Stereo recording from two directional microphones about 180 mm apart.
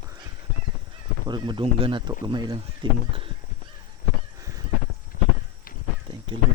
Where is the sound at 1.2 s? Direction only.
25° right (ahead or behind).